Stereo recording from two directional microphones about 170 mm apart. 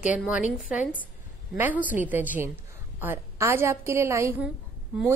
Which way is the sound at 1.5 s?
10° right (ahead or behind).